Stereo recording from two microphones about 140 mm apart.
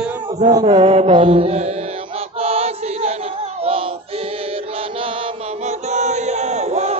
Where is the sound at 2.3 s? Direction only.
45° right (ahead or behind).